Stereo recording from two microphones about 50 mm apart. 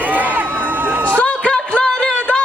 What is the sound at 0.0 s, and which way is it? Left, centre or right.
Crowd, right.